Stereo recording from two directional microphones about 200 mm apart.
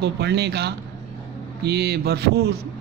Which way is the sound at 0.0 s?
55° right (ahead or behind).